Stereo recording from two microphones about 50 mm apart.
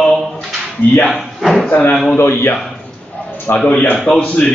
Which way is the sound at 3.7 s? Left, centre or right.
Left.